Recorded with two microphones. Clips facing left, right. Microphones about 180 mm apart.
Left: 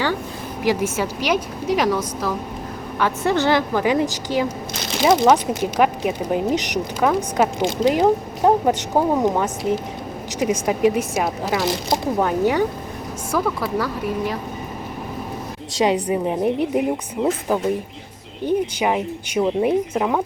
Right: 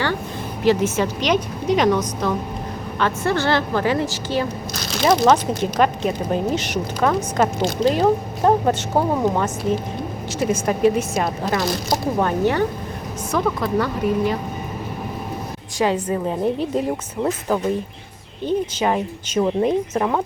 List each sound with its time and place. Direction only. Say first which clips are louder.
0.6 s speech: right 3 dB; 10° left (ahead or behind)
3.0 s speech: left 1 dB; 15° left (ahead or behind)
15.8 s speech: left 1 dB; 15° left (ahead or behind)
17.2 s speech: left 2 dB; centre (ahead or behind)
18.4 s speech: left 1 dB; 10° left (ahead or behind)